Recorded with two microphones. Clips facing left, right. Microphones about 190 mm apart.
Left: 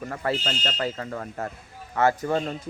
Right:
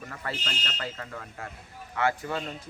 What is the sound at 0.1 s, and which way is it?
Speech, 45° left (ahead or behind).